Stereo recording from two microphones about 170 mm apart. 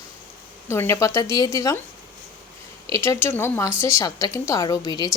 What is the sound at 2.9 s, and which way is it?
A woman's voice, 15° left (ahead or behind).